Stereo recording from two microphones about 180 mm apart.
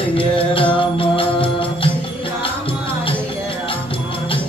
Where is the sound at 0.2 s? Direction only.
30° left (ahead or behind).